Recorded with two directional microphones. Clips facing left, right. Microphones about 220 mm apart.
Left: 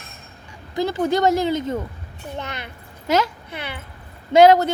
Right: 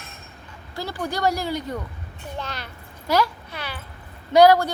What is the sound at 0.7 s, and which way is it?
A child's voice, 20° left (ahead or behind).